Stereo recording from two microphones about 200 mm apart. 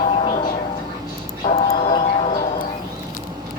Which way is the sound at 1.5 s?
25° left (ahead or behind).